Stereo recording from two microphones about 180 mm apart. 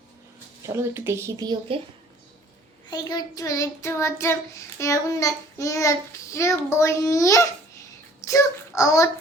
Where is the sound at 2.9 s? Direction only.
20° left (ahead or behind).